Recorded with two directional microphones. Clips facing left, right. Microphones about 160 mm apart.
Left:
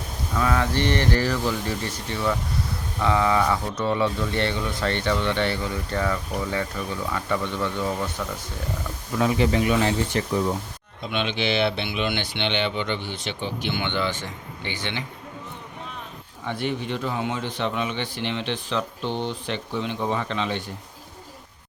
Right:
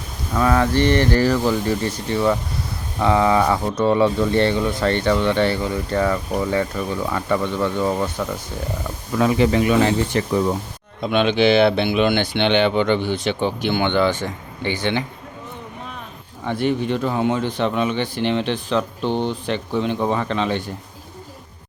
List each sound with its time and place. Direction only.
0.3 s speech: 45° right (ahead or behind)
9.1 s speech: 75° right (ahead or behind)
11.0 s speech: 50° right (ahead or behind)
16.5 s speech: 45° right (ahead or behind)